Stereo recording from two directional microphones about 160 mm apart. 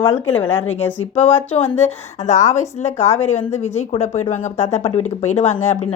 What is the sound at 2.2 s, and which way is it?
Speech, 50° left (ahead or behind).